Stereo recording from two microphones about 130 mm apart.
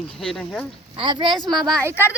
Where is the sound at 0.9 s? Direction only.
40° right (ahead or behind).